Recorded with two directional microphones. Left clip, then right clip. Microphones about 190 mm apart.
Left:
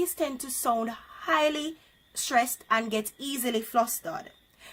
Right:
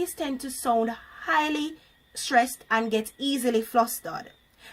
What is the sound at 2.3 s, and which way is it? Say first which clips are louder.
A woman's voice: right 2 dB; 15° left (ahead or behind).